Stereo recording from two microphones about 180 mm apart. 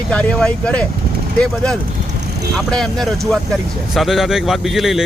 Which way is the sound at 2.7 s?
Centre (ahead or behind).